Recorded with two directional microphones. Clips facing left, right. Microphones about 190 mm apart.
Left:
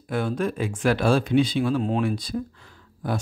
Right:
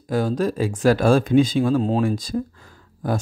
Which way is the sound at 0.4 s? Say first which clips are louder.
Right 4 dB; 40° right (ahead or behind).